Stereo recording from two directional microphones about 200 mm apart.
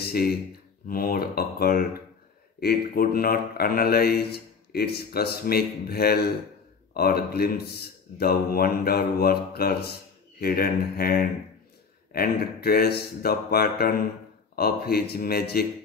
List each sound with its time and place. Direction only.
0.0 s speech: 50° left (ahead or behind)